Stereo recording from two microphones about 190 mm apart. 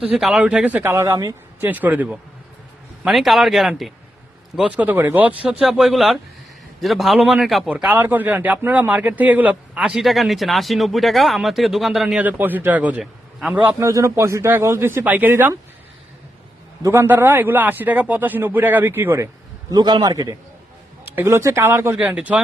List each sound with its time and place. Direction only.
0.1 s a man's voice: 5° right (ahead or behind)
16.8 s a man's voice: 15° right (ahead or behind)
19.7 s a man's voice: 25° right (ahead or behind); by 22.4 s 5° right (ahead or behind)